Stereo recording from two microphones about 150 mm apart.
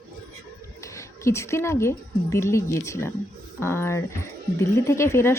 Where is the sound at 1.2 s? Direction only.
20° left (ahead or behind).